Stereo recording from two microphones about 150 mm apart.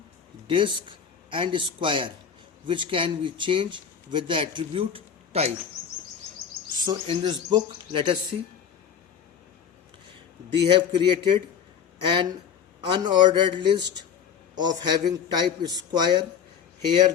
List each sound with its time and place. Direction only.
0.4 s a man's voice: 35° right (ahead or behind)
6.7 s speech: 30° right (ahead or behind)
10.7 s a man's voice: 35° right (ahead or behind)